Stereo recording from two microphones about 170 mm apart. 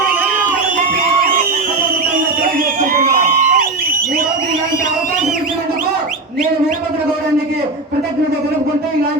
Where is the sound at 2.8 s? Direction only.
50° right (ahead or behind).